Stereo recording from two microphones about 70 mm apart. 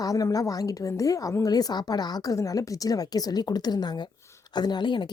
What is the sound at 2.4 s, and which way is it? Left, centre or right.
A woman's voice, left.